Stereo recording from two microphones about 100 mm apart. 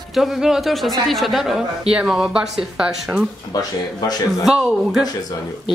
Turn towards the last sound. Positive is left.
turn(degrees=-5)  # may be behind; listen again after turning